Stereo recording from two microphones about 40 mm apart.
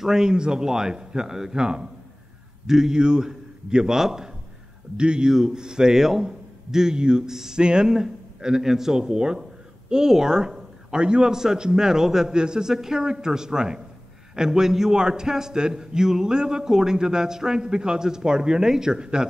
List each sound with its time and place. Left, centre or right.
0.0 s a man's voice: centre
4.9 s a man's voice: right